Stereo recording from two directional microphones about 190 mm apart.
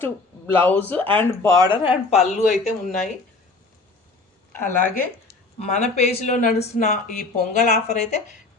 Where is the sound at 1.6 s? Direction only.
25° left (ahead or behind).